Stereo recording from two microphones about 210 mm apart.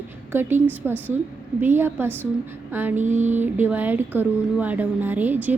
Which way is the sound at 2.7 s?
10° right (ahead or behind).